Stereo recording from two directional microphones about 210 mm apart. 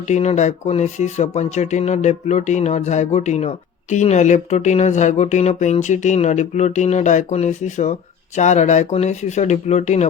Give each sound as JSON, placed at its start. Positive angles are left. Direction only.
{"t": 0.1, "sound": "speech", "side_deg": 35}